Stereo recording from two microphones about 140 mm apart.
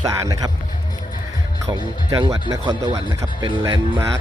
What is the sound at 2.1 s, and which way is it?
Speech, 25° right (ahead or behind).